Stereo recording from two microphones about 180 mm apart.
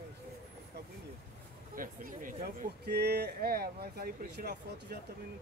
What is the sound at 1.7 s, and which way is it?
Speech, 50° right (ahead or behind).